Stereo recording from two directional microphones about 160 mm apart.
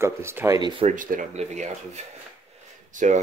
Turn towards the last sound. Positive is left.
turn(degrees=-50)  # may be behind; listen again after turning